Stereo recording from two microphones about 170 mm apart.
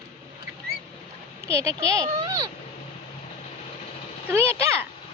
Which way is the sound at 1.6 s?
20° right (ahead or behind).